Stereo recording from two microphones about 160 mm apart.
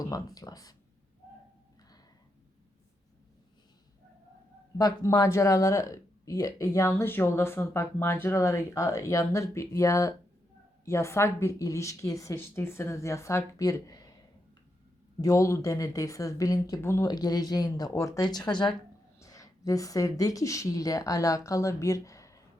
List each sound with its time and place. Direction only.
0.0 s speech: 20° left (ahead or behind)
4.8 s speech: 20° left (ahead or behind)
15.2 s speech: 20° left (ahead or behind)